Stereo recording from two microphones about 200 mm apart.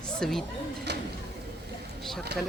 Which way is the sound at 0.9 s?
60° right (ahead or behind).